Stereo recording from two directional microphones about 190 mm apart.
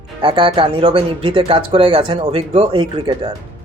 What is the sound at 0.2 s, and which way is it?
Speech, 25° right (ahead or behind).